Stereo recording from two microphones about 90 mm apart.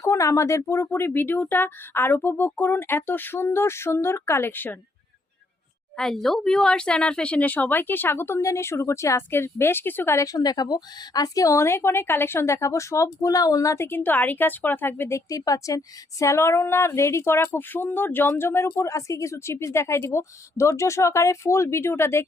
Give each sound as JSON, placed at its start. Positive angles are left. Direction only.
{"t": 0.0, "sound": "a woman's voice", "side_deg": 35}
{"t": 6.0, "sound": "a woman's voice", "side_deg": 5}
{"t": 10.2, "sound": "a woman's voice", "side_deg": 45}